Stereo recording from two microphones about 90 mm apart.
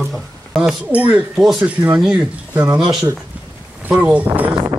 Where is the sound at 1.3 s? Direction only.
5° right (ahead or behind).